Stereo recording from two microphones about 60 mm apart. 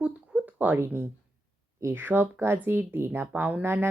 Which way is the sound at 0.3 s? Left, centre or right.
Right.